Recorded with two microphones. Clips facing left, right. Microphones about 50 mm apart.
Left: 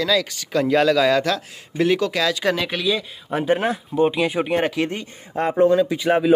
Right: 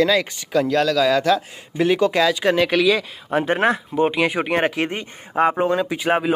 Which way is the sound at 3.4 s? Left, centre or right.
Right.